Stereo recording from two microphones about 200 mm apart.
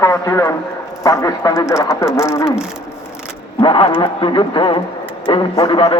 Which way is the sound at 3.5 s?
25° left (ahead or behind).